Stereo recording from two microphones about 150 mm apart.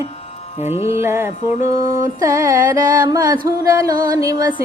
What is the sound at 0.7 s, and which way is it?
Music, 15° right (ahead or behind).